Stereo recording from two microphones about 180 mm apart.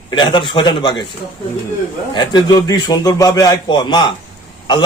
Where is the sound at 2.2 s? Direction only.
25° left (ahead or behind).